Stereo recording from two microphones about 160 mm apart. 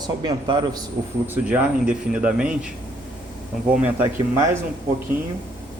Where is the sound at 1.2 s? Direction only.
10° right (ahead or behind).